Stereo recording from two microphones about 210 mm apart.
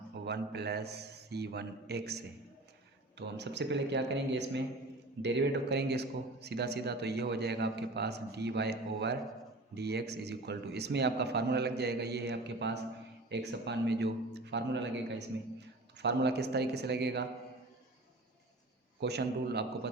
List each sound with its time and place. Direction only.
0.3 s a man's voice: 50° right (ahead or behind)
16.0 s a man's voice: 55° right (ahead or behind)
18.9 s a man's voice: 50° right (ahead or behind)